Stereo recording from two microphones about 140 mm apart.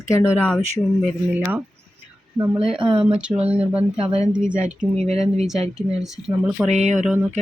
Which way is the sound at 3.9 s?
40° right (ahead or behind).